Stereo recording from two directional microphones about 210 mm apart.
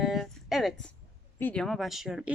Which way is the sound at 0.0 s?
Centre (ahead or behind).